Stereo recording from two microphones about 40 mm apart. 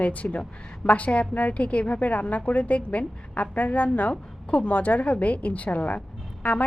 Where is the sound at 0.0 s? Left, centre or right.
Left.